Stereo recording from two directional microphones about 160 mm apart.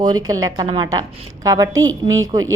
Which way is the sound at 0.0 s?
25° right (ahead or behind).